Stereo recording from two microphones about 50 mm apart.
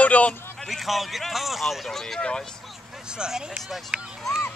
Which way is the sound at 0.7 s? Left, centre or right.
Centre.